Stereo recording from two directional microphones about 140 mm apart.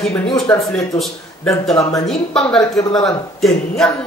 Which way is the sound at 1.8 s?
25° left (ahead or behind).